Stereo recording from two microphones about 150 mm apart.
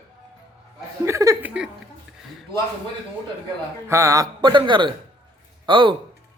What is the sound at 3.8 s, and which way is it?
A man's voice, 20° right (ahead or behind).